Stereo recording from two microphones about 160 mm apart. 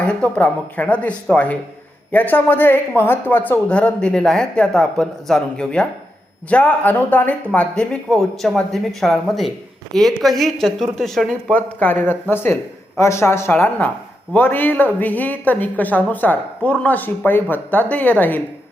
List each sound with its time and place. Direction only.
0.0 s speech: 10° left (ahead or behind)